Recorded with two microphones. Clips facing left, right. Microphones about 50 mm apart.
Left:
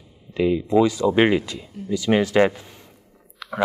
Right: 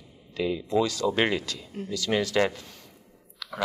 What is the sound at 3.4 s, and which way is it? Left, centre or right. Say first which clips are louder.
Chewing: left 6 dB; left.